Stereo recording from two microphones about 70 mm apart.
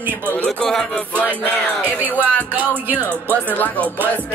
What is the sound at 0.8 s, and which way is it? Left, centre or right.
Music, centre.